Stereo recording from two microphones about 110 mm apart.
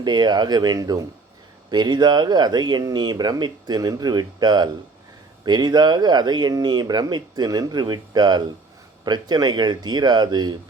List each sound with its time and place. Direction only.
0.0 s speech: 40° right (ahead or behind)